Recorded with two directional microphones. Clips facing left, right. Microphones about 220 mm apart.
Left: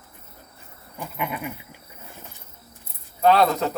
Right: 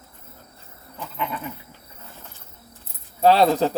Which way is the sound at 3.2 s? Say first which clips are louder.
Right 2 dB; 30° right (ahead or behind).